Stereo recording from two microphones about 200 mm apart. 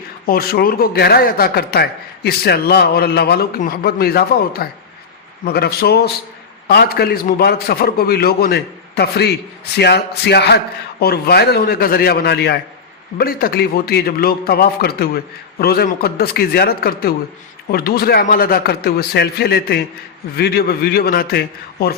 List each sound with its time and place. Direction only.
0.3 s a man's voice: 50° left (ahead or behind)